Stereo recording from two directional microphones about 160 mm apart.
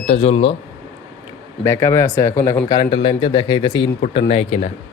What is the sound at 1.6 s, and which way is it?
Speech, 15° left (ahead or behind).